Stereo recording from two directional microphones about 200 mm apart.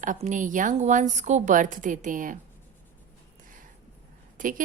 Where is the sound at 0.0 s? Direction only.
40° right (ahead or behind).